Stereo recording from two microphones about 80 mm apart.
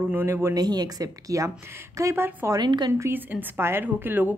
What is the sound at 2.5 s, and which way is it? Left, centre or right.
Speech, right.